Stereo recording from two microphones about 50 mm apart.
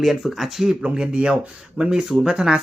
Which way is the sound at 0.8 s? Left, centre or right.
Centre.